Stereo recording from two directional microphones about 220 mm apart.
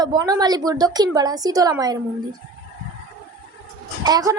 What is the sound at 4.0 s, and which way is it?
Speech, 15° right (ahead or behind).